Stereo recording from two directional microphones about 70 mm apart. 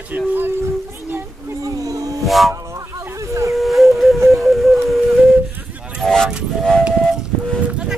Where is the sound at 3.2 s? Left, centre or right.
Right.